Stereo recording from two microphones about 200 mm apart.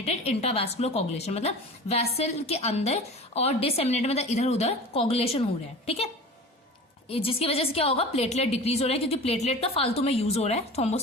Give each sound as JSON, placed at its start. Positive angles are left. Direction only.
{"t": 0.0, "sound": "a woman's voice", "side_deg": 30}
{"t": 7.1, "sound": "a woman's voice", "side_deg": 30}